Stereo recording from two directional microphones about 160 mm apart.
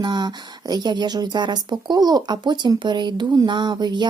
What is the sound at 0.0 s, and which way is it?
Speech, 25° right (ahead or behind).